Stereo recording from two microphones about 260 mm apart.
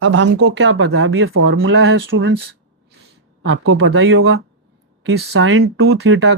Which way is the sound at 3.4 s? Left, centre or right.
Right.